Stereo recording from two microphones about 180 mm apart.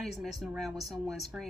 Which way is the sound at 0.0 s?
Centre (ahead or behind).